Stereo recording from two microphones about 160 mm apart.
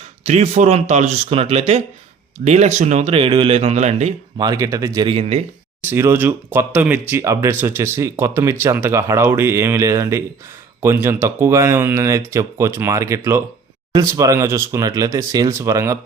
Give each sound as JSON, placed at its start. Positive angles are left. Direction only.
{"t": 0.3, "sound": "speech", "side_deg": -45}
{"t": 4.4, "sound": "speech", "side_deg": -25}
{"t": 5.0, "sound": "speech", "side_deg": -40}
{"t": 5.9, "sound": "speech", "side_deg": -15}